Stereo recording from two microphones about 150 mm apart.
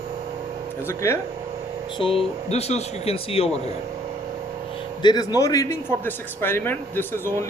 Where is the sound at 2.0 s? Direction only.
40° left (ahead or behind).